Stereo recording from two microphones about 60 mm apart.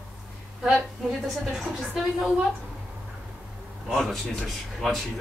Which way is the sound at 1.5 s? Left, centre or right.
Centre.